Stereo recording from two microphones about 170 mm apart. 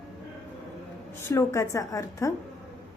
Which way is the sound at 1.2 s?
15° left (ahead or behind).